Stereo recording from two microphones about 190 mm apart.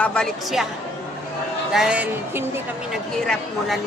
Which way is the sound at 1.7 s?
5° right (ahead or behind).